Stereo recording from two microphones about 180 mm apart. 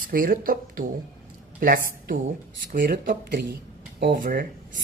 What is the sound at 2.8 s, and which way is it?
Speech, 60° right (ahead or behind).